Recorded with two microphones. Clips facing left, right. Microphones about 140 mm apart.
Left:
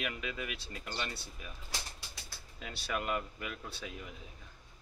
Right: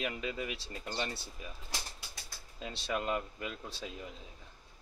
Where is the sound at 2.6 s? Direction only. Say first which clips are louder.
Right 2 dB; 25° right (ahead or behind).